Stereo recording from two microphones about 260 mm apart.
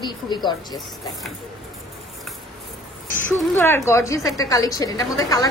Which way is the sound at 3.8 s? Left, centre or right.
Centre.